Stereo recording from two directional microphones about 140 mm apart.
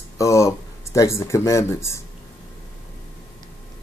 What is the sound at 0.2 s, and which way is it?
Speech, 20° left (ahead or behind).